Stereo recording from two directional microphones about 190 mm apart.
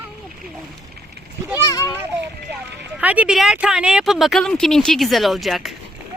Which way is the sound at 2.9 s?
5° right (ahead or behind).